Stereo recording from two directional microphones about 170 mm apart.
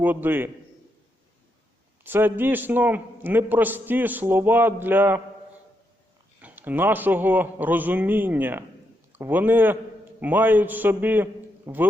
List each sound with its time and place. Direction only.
0.0 s a man's voice: 10° right (ahead or behind)
2.0 s a man's voice: 10° right (ahead or behind)
6.4 s a man's voice: 10° right (ahead or behind)